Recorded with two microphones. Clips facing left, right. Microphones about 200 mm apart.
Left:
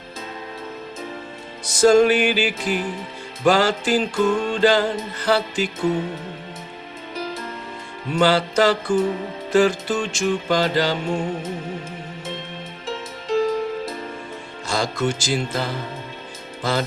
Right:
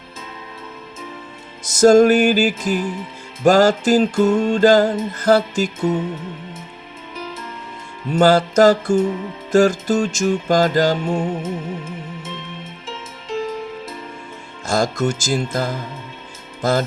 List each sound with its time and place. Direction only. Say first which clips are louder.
1.7 s music: right 3 dB; 45° right (ahead or behind)
8.2 s music: right 5 dB; 45° right (ahead or behind)
11.4 s music: right 3 dB; 35° left (ahead or behind)
14.7 s music: right 4 dB; 45° right (ahead or behind)
16.6 s speech: right 5 dB; 45° right (ahead or behind)